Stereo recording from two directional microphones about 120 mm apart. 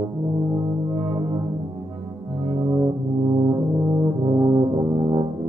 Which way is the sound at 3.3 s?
30° right (ahead or behind).